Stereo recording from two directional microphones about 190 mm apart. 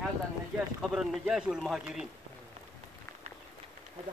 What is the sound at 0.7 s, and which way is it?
Speech, 5° right (ahead or behind).